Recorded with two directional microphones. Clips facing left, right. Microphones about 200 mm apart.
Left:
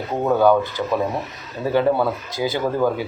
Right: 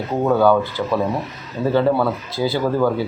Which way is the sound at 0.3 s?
15° left (ahead or behind).